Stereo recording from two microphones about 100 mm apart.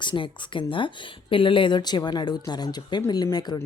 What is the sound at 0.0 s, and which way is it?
Speech, 55° left (ahead or behind).